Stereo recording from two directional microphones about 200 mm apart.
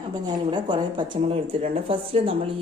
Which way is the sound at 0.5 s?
25° right (ahead or behind).